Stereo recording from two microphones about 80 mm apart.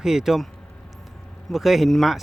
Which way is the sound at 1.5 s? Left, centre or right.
Centre.